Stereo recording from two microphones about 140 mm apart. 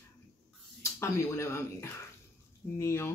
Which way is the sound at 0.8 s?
20° left (ahead or behind).